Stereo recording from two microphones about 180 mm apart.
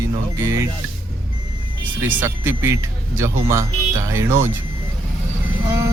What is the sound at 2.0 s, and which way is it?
Speech, 10° right (ahead or behind).